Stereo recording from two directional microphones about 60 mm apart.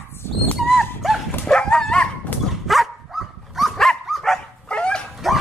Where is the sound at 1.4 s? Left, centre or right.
Centre.